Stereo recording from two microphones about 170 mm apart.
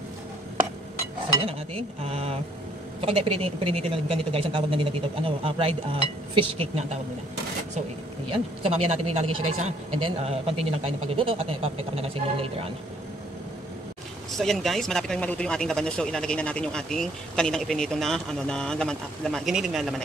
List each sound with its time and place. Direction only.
2.0 s speech: 35° right (ahead or behind)
8.3 s speech: 40° right (ahead or behind)
14.3 s speech: centre (ahead or behind)